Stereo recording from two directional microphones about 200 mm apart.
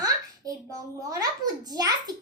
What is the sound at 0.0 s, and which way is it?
A child's voice, 15° right (ahead or behind).